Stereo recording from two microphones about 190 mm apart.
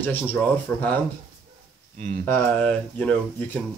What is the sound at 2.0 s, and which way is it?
Speech, 40° right (ahead or behind).